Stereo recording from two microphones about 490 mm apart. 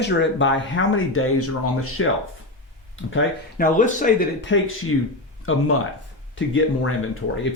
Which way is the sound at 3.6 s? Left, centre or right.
Centre.